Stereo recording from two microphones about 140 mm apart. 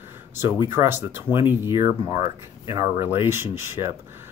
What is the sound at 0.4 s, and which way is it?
Speech, 15° right (ahead or behind).